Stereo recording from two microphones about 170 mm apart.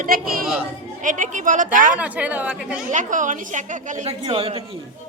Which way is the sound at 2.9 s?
45° right (ahead or behind).